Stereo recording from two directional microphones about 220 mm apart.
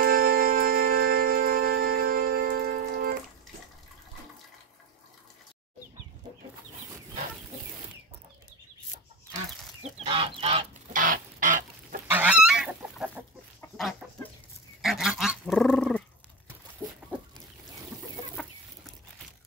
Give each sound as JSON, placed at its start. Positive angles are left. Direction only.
{"t": 0.0, "sound": "music", "side_deg": -40}
{"t": 9.8, "sound": "goose", "side_deg": -25}
{"t": 10.9, "sound": "chicken", "side_deg": -40}
{"t": 12.1, "sound": "goose", "side_deg": -5}
{"t": 13.6, "sound": "chicken", "side_deg": 0}
{"t": 14.8, "sound": "goose", "side_deg": 0}
{"t": 16.8, "sound": "a sound", "side_deg": -15}
{"t": 18.1, "sound": "chicken", "side_deg": 0}